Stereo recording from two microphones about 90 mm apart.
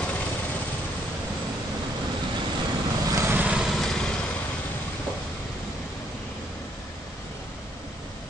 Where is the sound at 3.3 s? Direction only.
20° right (ahead or behind).